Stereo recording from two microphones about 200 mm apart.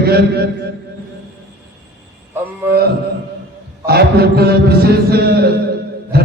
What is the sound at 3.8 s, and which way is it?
Music, 50° right (ahead or behind).